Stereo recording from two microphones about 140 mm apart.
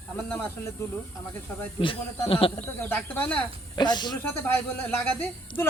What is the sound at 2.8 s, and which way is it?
Speech, 15° left (ahead or behind).